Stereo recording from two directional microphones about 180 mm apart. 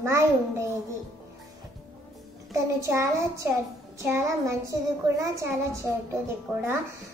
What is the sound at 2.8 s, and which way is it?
A woman's voice, 15° right (ahead or behind).